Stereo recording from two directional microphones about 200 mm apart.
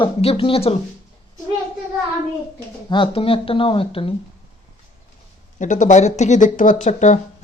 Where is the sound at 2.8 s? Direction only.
25° left (ahead or behind).